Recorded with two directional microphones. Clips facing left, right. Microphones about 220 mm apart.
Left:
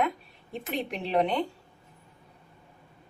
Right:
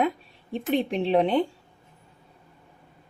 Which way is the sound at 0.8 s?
30° right (ahead or behind).